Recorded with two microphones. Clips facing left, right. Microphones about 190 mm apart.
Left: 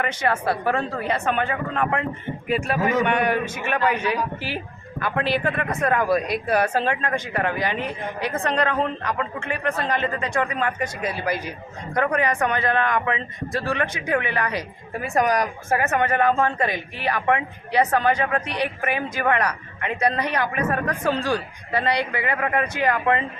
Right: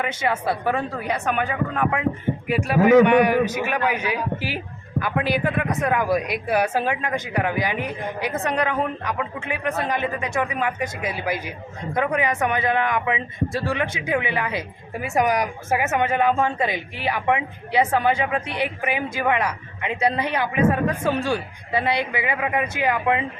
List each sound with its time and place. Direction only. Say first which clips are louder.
0.0 s a man's voice: even; 10° right (ahead or behind)
22.1 s a man's voice: even; 10° right (ahead or behind)